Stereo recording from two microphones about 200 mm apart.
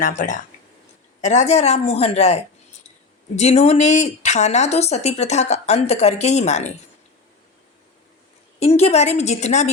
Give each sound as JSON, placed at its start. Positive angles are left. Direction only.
{"t": 0.2, "sound": "speech", "side_deg": 40}
{"t": 8.5, "sound": "speech", "side_deg": 30}